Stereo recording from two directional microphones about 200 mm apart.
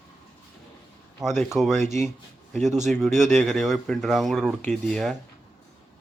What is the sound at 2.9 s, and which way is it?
Speech, centre (ahead or behind).